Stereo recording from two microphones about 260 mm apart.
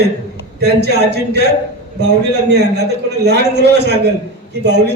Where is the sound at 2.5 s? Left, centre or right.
Right.